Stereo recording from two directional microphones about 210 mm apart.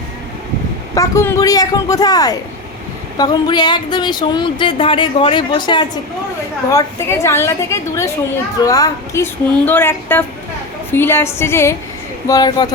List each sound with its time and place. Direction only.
0.9 s a man's voice: 15° left (ahead or behind)